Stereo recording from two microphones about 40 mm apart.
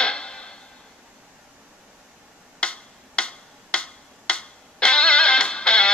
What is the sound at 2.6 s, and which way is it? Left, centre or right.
Tick-tock, left.